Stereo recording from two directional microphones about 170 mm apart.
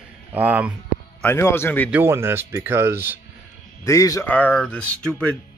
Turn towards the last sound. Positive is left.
turn(degrees=10)  # may be behind; listen again after turning